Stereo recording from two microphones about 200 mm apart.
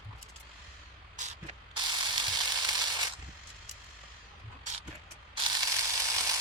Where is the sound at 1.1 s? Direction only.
35° right (ahead or behind).